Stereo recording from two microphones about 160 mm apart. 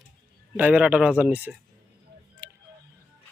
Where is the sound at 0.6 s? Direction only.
10° right (ahead or behind).